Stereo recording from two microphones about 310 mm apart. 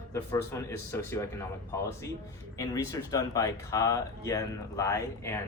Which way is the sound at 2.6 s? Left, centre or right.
Centre.